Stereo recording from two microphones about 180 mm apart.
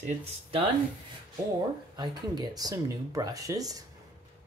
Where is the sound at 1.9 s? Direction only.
20° right (ahead or behind).